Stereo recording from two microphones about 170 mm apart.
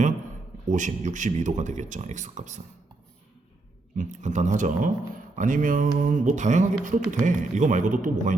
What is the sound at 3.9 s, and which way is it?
Speech, 50° right (ahead or behind).